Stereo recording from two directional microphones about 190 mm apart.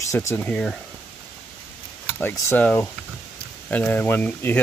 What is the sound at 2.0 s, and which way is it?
Speech, 10° left (ahead or behind).